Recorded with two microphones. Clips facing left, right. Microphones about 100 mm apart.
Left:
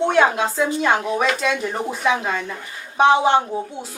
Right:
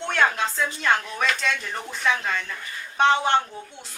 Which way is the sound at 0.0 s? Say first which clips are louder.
Left 6 dB; 10° left (ahead or behind).